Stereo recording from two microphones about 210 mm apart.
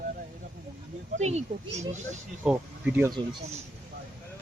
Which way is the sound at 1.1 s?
30° right (ahead or behind).